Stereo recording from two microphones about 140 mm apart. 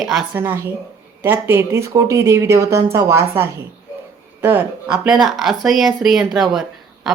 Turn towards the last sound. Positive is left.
turn(degrees=0)  # may be behind; listen again after turning